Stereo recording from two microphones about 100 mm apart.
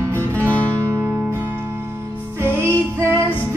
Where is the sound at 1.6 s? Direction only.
25° right (ahead or behind).